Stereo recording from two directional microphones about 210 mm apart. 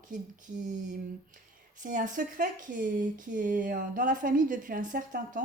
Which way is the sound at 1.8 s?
40° right (ahead or behind).